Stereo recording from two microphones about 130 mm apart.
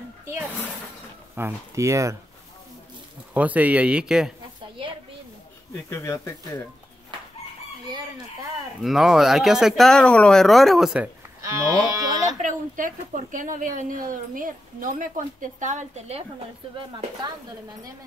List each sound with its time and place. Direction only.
1.3 s speech: 20° right (ahead or behind)
3.3 s speech: 10° right (ahead or behind)
5.9 s speech: 20° left (ahead or behind)
8.8 s speech: 5° right (ahead or behind)
11.4 s speech: 25° right (ahead or behind)
12.4 s a woman's voice: 85° right; by 16.3 s 55° right (ahead or behind)
16.7 s speech: 40° right (ahead or behind)